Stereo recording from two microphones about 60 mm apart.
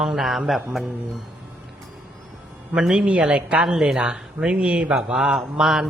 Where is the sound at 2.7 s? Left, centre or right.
Centre.